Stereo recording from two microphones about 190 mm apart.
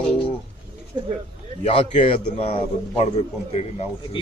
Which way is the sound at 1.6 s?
30° left (ahead or behind).